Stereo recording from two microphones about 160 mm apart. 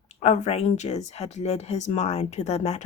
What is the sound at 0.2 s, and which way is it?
Speech, 45° left (ahead or behind).